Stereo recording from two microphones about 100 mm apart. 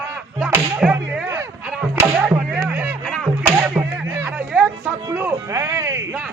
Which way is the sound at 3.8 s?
25° right (ahead or behind).